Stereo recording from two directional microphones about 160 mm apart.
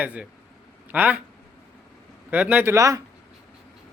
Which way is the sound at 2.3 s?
10° right (ahead or behind).